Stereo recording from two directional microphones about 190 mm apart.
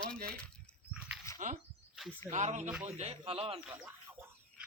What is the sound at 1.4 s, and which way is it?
Speech, 40° right (ahead or behind).